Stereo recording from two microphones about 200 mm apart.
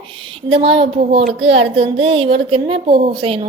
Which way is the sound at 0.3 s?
25° right (ahead or behind).